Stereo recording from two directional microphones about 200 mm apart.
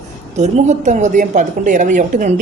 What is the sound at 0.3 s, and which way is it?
Speech, 35° right (ahead or behind).